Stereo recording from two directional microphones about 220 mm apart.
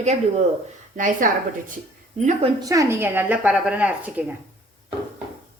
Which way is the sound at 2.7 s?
15° right (ahead or behind).